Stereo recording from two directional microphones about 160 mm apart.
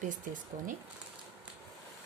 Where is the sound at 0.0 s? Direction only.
55° right (ahead or behind).